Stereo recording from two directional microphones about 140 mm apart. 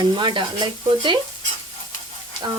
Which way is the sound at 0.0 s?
35° right (ahead or behind).